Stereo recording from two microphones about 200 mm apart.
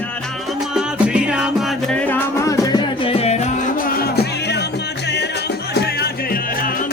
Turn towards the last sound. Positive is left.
turn(degrees=45)  # may be behind; listen again after turning